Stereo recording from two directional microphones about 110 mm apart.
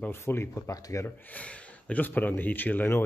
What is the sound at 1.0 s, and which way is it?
Speech, 15° left (ahead or behind).